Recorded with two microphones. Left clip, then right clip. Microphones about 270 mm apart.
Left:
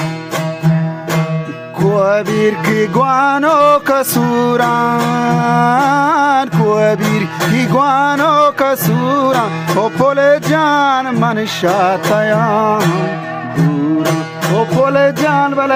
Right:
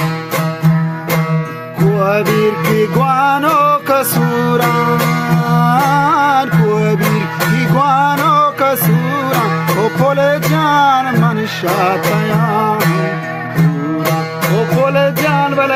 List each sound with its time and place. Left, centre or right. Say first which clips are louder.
2.0 s music: even; left
14.5 s music: left 2 dB; left